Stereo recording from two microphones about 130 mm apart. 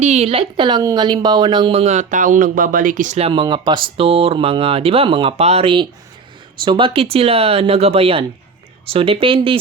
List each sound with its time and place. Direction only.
0.0 s speech: 55° right (ahead or behind); by 3.2 s 85° right
3.2 s speech: 50° right (ahead or behind)
3.4 s speech: 35° right (ahead or behind)